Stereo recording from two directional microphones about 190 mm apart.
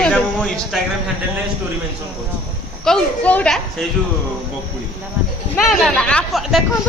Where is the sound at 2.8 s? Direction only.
5° left (ahead or behind).